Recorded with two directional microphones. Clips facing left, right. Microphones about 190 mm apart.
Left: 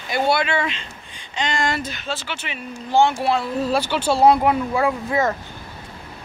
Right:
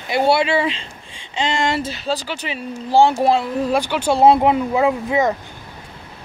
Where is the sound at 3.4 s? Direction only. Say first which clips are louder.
Right 2 dB; 15° right (ahead or behind).